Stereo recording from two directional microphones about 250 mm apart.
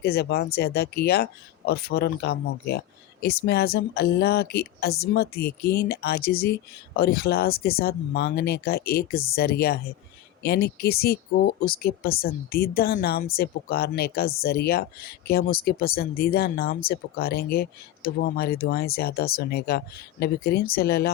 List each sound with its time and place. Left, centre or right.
0.0 s speech: left